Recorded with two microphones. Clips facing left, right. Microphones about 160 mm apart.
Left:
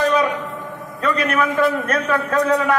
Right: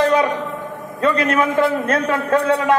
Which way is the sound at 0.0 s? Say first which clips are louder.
Right 2 dB; 30° right (ahead or behind).